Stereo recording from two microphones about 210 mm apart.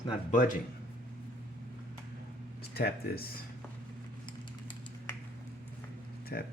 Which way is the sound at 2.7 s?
45° left (ahead or behind).